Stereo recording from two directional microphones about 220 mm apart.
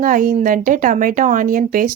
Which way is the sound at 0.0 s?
40° right (ahead or behind).